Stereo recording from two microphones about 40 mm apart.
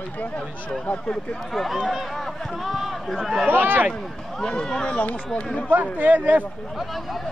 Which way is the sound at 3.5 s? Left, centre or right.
Right.